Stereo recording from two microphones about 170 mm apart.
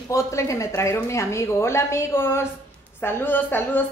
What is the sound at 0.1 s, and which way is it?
A woman's voice, 20° left (ahead or behind).